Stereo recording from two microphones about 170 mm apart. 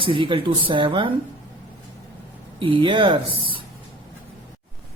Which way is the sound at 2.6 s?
30° right (ahead or behind).